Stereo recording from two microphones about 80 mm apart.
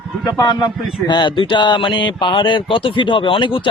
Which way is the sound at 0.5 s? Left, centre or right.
Left.